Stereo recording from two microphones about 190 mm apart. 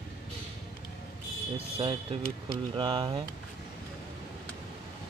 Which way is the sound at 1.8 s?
30° right (ahead or behind).